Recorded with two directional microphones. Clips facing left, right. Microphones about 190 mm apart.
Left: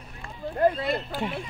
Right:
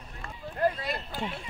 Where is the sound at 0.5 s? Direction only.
55° left (ahead or behind).